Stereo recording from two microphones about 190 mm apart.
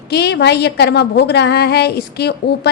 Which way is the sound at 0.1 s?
60° left (ahead or behind).